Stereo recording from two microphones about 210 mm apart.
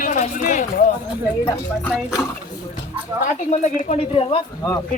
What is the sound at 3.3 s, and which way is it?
A man's voice, 35° left (ahead or behind).